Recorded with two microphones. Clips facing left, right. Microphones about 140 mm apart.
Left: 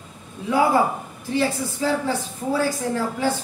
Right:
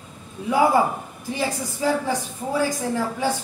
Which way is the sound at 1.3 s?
15° right (ahead or behind).